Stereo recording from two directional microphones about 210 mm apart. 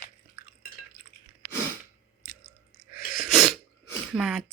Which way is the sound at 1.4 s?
50° right (ahead or behind).